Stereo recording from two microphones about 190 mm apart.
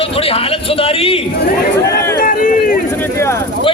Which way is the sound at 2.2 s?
45° left (ahead or behind).